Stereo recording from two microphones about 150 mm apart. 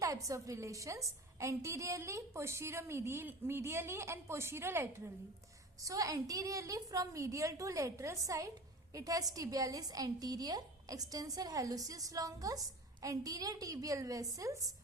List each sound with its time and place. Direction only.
0.0 s a woman's voice: 20° right (ahead or behind)